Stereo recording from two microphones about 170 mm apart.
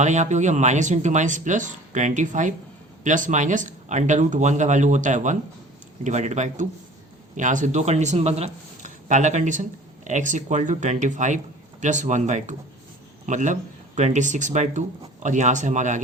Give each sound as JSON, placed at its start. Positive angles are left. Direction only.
{"t": 0.0, "sound": "speech", "side_deg": -45}